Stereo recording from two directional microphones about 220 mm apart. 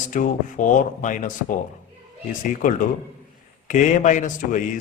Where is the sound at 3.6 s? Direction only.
35° left (ahead or behind).